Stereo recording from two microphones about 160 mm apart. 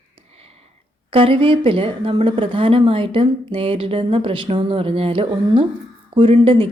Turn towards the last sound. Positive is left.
turn(degrees=-35)  # may be behind; listen again after turning